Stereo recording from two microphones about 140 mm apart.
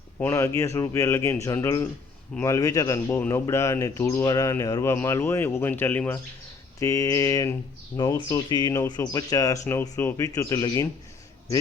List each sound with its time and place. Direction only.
0.2 s speech: 20° left (ahead or behind)